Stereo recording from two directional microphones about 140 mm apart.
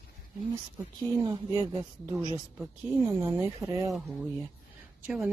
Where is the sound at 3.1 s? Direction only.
15° right (ahead or behind).